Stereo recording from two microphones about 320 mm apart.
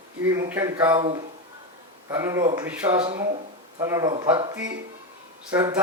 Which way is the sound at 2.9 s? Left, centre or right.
Centre.